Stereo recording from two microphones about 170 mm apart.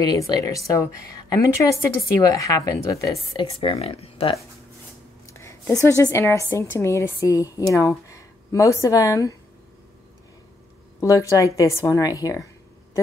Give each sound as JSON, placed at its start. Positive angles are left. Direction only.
{"t": 0.0, "sound": "a woman's voice", "side_deg": 20}
{"t": 3.4, "sound": "speech", "side_deg": 35}
{"t": 5.3, "sound": "a sound", "side_deg": 15}
{"t": 6.1, "sound": "speech", "side_deg": 15}
{"t": 11.0, "sound": "a woman's voice", "side_deg": 20}